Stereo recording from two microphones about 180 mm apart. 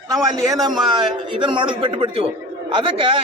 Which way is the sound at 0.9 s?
25° right (ahead or behind).